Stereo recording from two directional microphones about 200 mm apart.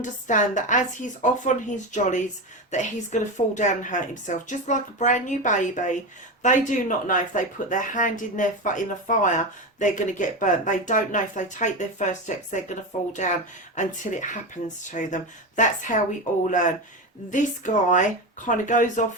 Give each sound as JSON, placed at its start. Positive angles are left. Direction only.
{"t": 0.0, "sound": "speech", "side_deg": 40}
{"t": 14.6, "sound": "speech", "side_deg": 60}
{"t": 14.9, "sound": "speech", "side_deg": 40}
{"t": 17.3, "sound": "speech", "side_deg": 40}